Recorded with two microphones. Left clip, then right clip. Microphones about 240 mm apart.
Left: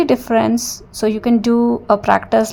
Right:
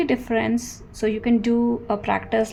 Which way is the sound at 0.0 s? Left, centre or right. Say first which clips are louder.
Left 8 dB; left.